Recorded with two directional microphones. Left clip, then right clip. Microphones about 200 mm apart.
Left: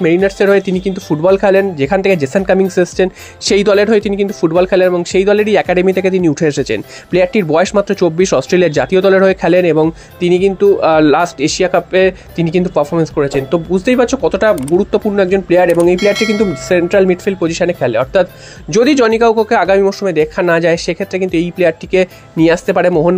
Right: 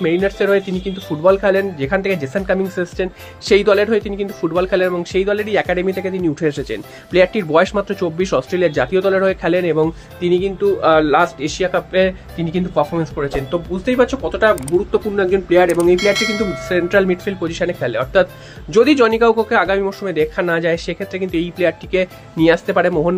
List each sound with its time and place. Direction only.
0.0 s speech: 30° left (ahead or behind)
16.0 s bell: centre (ahead or behind)
16.6 s speech: 25° left (ahead or behind)